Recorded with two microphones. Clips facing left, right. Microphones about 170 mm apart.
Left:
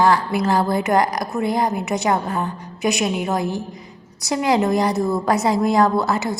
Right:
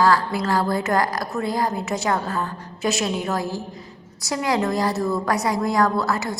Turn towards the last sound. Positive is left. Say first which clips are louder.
# left 3 dB
turn(degrees=20)  # may be behind; listen again after turning